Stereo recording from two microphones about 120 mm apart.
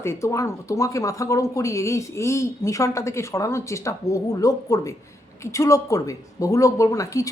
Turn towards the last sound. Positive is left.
turn(degrees=25)  # may be behind; listen again after turning